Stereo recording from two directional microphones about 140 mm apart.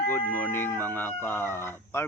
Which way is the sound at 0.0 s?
15° left (ahead or behind).